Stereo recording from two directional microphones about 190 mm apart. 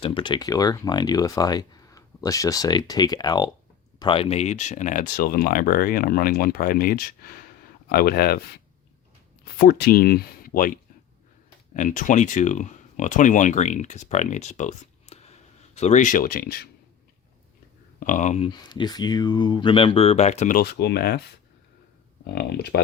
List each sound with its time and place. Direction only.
0.0 s speech: 25° left (ahead or behind); by 16.6 s 50° left (ahead or behind)
18.0 s speech: 40° left (ahead or behind); by 21.2 s 60° left (ahead or behind)
22.4 s speech: 60° left (ahead or behind)